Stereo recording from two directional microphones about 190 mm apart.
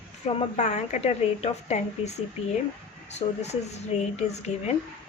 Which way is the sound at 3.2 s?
35° left (ahead or behind).